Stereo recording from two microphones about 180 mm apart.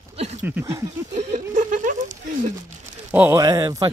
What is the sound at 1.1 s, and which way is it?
Speech, 45° right (ahead or behind).